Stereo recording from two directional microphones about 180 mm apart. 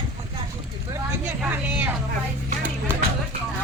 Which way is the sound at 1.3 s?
10° right (ahead or behind).